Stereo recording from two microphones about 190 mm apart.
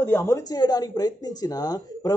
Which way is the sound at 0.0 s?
15° left (ahead or behind).